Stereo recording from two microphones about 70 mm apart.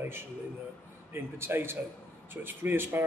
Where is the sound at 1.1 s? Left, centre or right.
Right.